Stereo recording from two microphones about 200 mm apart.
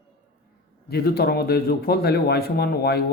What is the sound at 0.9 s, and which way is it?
A man's voice, 50° left (ahead or behind).